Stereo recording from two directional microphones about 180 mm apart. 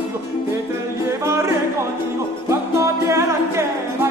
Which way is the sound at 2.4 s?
15° right (ahead or behind).